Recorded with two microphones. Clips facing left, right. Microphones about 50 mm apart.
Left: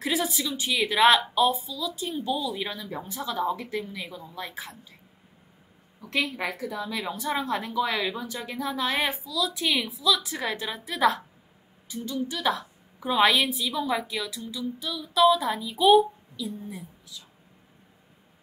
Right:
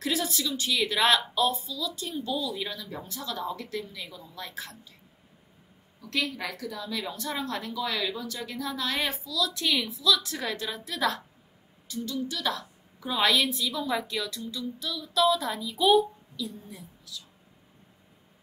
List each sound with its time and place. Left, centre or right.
0.0 s a woman's voice: centre
5.9 s a woman's voice: left